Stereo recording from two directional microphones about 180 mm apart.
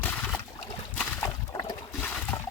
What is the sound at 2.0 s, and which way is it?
Water, 5° left (ahead or behind).